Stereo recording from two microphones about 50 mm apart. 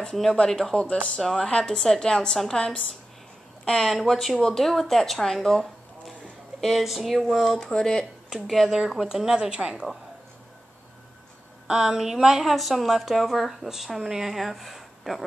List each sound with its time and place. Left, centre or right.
0.0 s a woman's voice: centre
0.8 s speech: left
1.2 s a woman's voice: centre
3.6 s a woman's voice: centre
8.6 s a woman's voice: centre
11.6 s a woman's voice: centre